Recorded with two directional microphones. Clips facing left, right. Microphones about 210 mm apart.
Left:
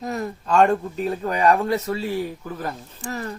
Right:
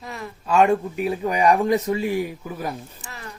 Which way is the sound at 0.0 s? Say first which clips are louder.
Left 7 dB; 40° left (ahead or behind).